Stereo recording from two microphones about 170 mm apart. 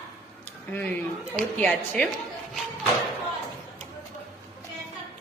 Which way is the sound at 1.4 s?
5° left (ahead or behind).